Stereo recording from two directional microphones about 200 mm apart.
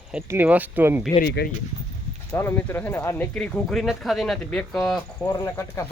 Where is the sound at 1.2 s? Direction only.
55° left (ahead or behind).